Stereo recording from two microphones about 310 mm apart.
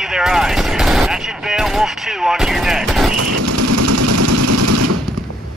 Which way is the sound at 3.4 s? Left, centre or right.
Right.